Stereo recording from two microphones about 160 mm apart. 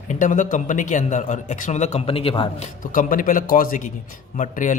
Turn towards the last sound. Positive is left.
turn(degrees=50)  # may be behind; listen again after turning